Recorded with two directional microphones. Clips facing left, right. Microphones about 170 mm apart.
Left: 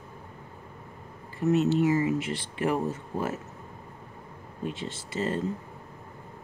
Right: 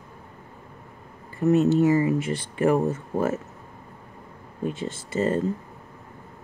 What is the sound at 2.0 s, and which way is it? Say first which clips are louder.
Speech: right 4 dB; 50° right (ahead or behind).